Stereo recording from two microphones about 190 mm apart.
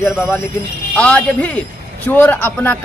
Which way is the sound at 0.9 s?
5° left (ahead or behind).